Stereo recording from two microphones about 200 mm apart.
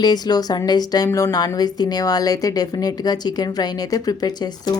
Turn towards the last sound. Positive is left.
turn(degrees=20)  # may be behind; listen again after turning